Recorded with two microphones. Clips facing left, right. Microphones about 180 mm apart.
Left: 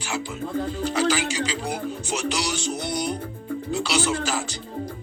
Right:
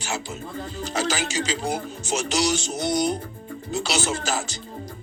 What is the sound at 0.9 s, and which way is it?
Speech, 45° right (ahead or behind).